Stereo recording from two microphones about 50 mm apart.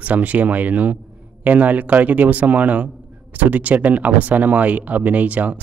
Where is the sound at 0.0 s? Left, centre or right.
Right.